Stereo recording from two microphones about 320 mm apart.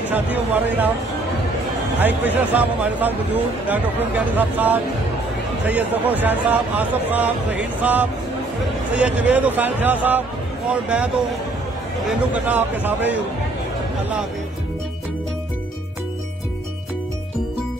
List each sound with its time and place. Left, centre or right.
0.1 s a man's voice: centre
2.0 s a man's voice: centre
12.1 s a man's voice: centre